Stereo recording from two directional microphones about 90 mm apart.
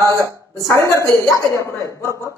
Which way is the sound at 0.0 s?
40° right (ahead or behind).